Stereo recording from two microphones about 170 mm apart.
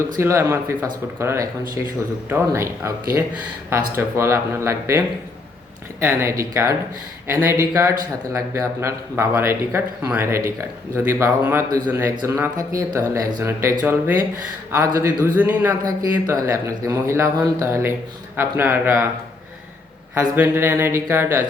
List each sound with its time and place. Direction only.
0.1 s speech: 15° right (ahead or behind)
20.1 s speech: 15° right (ahead or behind)